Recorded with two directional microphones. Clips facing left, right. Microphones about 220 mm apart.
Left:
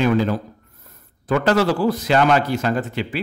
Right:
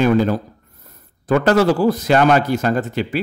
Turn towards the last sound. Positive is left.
turn(degrees=-45)  # may be behind; listen again after turning